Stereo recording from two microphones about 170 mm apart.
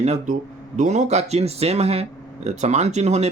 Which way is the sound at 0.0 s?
40° right (ahead or behind).